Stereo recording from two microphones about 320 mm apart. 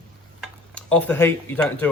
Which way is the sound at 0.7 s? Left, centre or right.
Centre.